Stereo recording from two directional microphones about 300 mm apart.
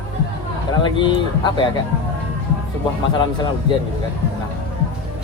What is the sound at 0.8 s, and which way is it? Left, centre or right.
Speech, centre.